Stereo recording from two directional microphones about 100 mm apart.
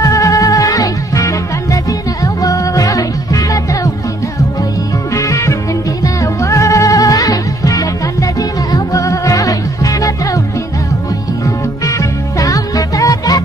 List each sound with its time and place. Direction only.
0.0 s music: 35° left (ahead or behind)
5.1 s music: 30° left (ahead or behind)
11.4 s music: 35° left (ahead or behind)